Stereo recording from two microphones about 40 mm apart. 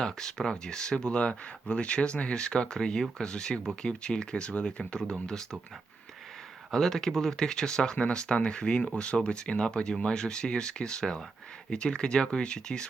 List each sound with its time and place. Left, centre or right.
0.0 s speech: centre
6.7 s speech: centre